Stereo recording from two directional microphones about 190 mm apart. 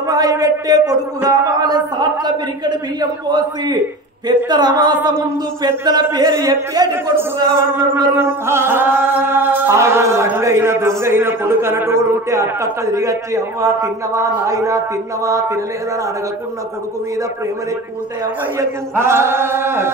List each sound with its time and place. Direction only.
0.0 s a man's voice: 20° right (ahead or behind)
18.2 s a man's voice: 15° right (ahead or behind)